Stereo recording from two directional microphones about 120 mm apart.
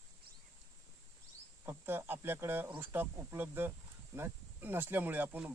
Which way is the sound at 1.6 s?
20° right (ahead or behind).